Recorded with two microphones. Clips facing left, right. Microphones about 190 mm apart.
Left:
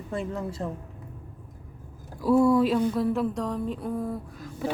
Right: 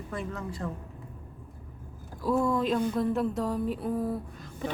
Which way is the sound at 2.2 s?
10° left (ahead or behind).